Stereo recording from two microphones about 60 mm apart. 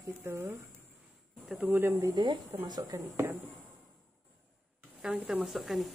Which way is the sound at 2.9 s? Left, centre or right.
Right.